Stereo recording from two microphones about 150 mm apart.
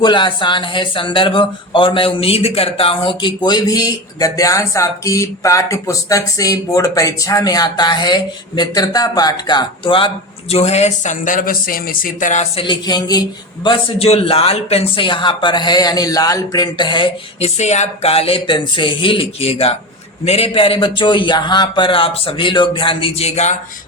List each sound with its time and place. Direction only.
0.0 s speech: 30° left (ahead or behind)
10.5 s speech: 45° left (ahead or behind)
12.5 s speech: 30° left (ahead or behind)
17.6 s speech: 50° left (ahead or behind)